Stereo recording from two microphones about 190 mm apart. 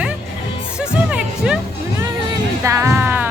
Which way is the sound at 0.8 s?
5° right (ahead or behind).